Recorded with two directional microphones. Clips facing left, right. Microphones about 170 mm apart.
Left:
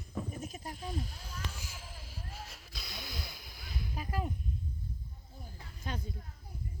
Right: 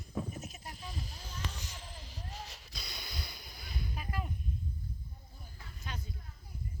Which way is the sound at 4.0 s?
35° left (ahead or behind).